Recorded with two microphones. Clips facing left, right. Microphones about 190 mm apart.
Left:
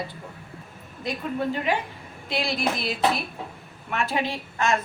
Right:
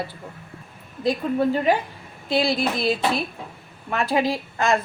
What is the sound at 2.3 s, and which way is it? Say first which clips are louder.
A woman's voice: right 5 dB; 30° right (ahead or behind).